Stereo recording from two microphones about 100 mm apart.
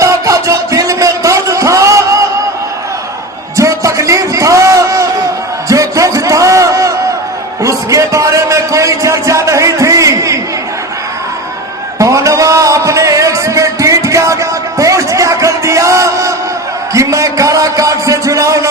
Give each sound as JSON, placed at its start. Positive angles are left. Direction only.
{"t": 0.0, "sound": "music", "side_deg": -30}
{"t": 3.6, "sound": "a sound", "side_deg": -30}
{"t": 11.9, "sound": "music", "side_deg": -30}